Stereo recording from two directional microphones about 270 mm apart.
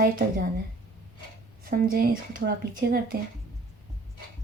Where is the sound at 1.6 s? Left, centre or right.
Right.